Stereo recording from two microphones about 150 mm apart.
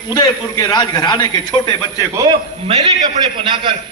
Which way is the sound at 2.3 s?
40° right (ahead or behind).